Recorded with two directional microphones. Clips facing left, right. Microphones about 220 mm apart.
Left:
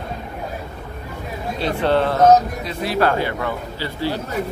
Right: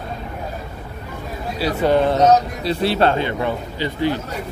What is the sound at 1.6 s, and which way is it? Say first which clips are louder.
Speech: right 2 dB; 5° right (ahead or behind).